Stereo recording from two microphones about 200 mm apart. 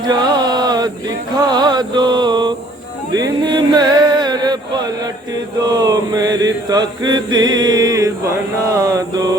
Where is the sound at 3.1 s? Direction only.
20° right (ahead or behind).